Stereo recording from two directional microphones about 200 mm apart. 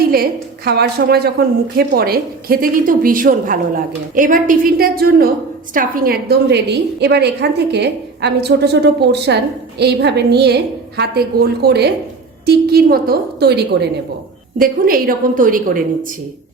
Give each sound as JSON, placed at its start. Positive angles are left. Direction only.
{"t": 0.1, "sound": "a woman's voice", "side_deg": -50}